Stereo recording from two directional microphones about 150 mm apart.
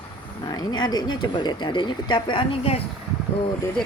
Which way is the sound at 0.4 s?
30° left (ahead or behind).